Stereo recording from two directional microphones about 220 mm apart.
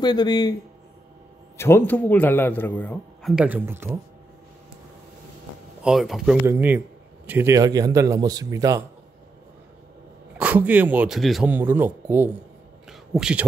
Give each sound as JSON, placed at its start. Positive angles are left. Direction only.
{"t": 0.0, "sound": "speech", "side_deg": 20}
{"t": 1.6, "sound": "a man's voice", "side_deg": 10}
{"t": 5.8, "sound": "a man's voice", "side_deg": 0}
{"t": 10.3, "sound": "a man's voice", "side_deg": -5}